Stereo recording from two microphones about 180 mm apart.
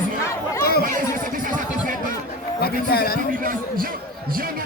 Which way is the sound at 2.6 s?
60° left (ahead or behind).